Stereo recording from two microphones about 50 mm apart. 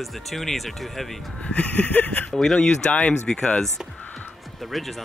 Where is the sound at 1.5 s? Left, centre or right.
Left.